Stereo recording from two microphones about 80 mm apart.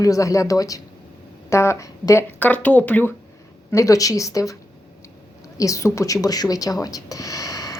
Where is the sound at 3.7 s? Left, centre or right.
Left.